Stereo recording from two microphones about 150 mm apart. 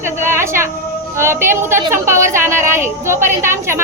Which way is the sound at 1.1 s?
15° right (ahead or behind).